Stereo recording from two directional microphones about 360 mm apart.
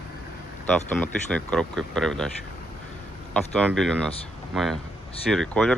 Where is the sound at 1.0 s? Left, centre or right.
Centre.